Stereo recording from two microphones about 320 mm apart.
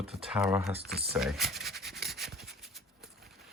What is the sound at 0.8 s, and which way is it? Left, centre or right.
Speech, right.